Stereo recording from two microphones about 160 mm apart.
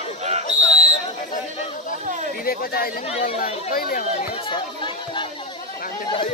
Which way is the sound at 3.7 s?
65° left (ahead or behind).